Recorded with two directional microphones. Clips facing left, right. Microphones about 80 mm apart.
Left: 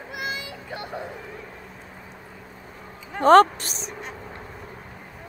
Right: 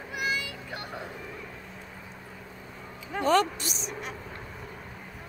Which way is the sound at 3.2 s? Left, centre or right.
Left.